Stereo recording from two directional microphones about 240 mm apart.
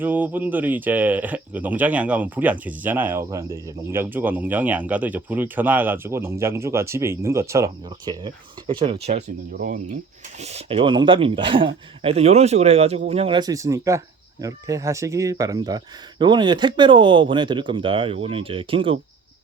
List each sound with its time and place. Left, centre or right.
0.0 s speech: centre; by 10.0 s right
10.4 s speech: right